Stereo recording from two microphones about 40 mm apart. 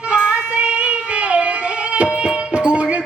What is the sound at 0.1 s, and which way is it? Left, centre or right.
Music, right.